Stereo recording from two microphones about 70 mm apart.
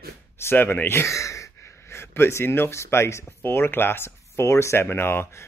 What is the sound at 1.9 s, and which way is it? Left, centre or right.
Speech, left.